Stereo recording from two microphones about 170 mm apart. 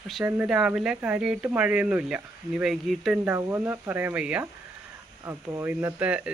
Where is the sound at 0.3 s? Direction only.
5° right (ahead or behind).